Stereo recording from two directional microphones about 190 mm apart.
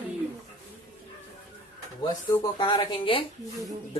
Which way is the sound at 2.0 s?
25° left (ahead or behind).